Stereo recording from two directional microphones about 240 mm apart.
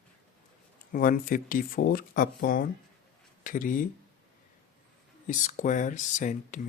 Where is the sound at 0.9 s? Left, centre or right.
Left.